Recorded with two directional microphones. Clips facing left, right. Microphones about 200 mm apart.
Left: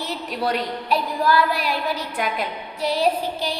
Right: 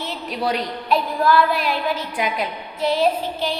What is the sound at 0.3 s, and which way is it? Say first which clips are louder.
Speech: right 1 dB; centre (ahead or behind).